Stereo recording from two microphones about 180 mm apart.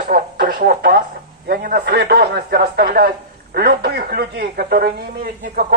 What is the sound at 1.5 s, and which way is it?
Speech, 60° right (ahead or behind).